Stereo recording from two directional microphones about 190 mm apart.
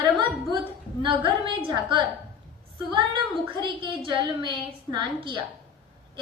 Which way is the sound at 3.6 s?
25° right (ahead or behind).